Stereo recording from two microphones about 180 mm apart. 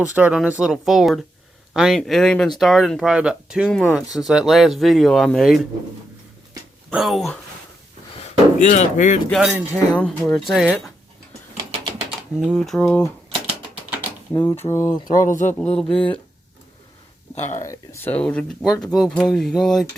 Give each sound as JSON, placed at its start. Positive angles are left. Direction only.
{"t": 0.0, "sound": "speech", "side_deg": -5}
{"t": 6.9, "sound": "speech", "side_deg": 0}
{"t": 8.2, "sound": "speech", "side_deg": 40}
{"t": 9.3, "sound": "speech", "side_deg": 0}
{"t": 11.5, "sound": "a sound", "side_deg": -25}
{"t": 12.4, "sound": "speech", "side_deg": 0}
{"t": 14.3, "sound": "speech", "side_deg": 15}
{"t": 15.3, "sound": "a man's voice", "side_deg": 45}
{"t": 15.5, "sound": "speech", "side_deg": 5}
{"t": 15.9, "sound": "speech", "side_deg": 30}
{"t": 17.3, "sound": "speech", "side_deg": 40}
{"t": 17.6, "sound": "speech", "side_deg": 15}